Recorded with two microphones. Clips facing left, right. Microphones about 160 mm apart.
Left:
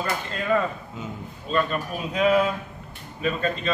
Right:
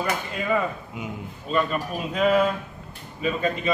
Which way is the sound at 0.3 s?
10° right (ahead or behind).